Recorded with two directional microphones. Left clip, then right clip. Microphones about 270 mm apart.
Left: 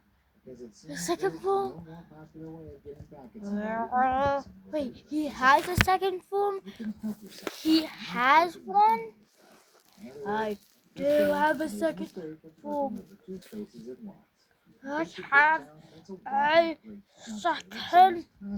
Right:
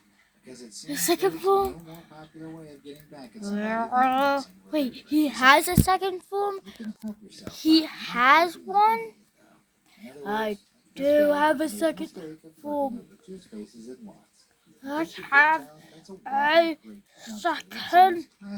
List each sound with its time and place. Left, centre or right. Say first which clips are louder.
0.9 s speech: right 6 dB; right
3.4 s speech: right 4 dB; right
5.9 s speech: right 2 dB; right
14.8 s speech: right 2 dB; right